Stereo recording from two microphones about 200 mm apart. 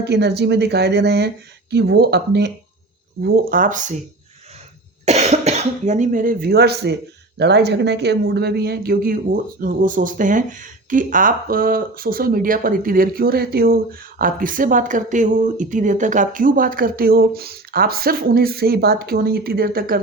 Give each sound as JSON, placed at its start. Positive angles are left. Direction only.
{"t": 0.0, "sound": "speech", "side_deg": -55}
{"t": 3.2, "sound": "speech", "side_deg": -45}
{"t": 5.0, "sound": "speech", "side_deg": -35}